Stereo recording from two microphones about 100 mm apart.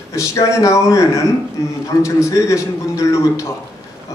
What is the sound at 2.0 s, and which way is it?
Speech, 30° left (ahead or behind).